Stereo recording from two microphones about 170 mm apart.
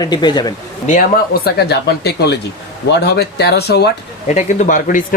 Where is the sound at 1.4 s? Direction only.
75° left (ahead or behind).